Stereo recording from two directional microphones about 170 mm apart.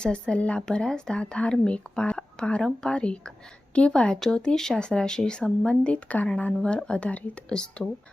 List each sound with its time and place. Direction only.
0.0 s speech: 5° left (ahead or behind)